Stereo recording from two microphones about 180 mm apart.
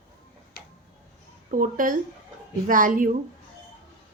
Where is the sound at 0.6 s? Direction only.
55° left (ahead or behind).